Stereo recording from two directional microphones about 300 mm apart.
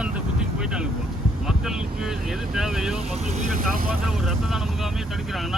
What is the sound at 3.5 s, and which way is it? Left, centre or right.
Speech, right.